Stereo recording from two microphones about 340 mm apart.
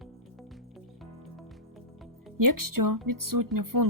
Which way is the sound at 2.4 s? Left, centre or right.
Right.